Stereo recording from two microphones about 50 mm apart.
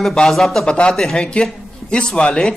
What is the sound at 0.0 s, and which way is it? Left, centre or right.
A man's voice, centre.